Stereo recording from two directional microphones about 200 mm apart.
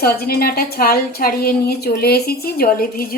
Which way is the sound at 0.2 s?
50° left (ahead or behind).